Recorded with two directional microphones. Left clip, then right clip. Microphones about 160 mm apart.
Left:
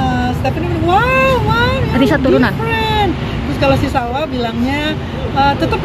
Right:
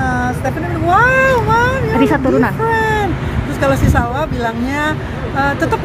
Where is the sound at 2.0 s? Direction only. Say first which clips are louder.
Left 2 dB; 10° right (ahead or behind).